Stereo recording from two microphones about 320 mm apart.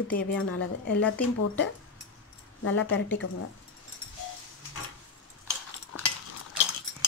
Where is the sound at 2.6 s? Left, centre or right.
Left.